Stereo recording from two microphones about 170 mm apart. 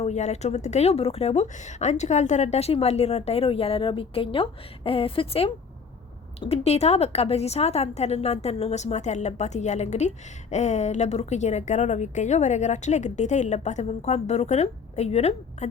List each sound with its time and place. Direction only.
0.0 s a woman's voice: 40° left (ahead or behind)